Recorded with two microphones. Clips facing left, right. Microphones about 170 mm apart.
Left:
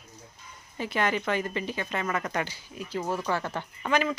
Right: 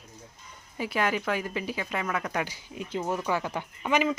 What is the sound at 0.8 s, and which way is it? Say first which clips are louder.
Speech: even; 5° right (ahead or behind).